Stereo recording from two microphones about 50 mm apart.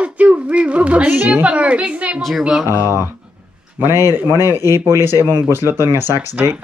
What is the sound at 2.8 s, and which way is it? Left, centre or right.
Speech, right.